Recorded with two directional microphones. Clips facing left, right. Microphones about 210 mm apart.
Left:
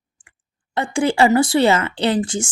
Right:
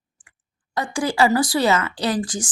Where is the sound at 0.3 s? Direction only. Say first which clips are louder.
Left 3 dB; 25° left (ahead or behind).